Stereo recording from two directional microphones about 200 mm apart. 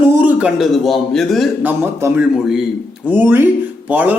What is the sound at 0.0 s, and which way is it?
A man's voice, 10° right (ahead or behind).